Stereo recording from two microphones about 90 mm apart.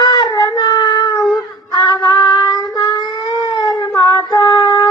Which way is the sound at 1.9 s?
50° left (ahead or behind).